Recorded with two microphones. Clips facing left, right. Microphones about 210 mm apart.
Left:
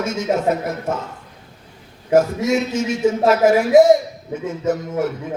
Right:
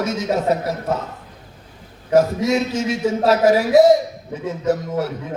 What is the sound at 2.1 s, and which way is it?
A man's voice, 50° left (ahead or behind).